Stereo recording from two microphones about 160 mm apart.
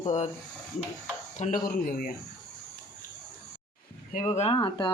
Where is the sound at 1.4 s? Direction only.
55° left (ahead or behind).